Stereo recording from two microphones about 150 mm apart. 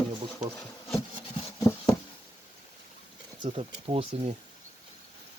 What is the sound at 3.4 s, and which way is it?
Speech, 35° right (ahead or behind).